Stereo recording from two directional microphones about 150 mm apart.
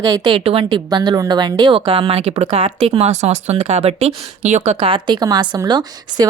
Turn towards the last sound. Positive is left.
turn(degrees=-25)  # may be behind; listen again after turning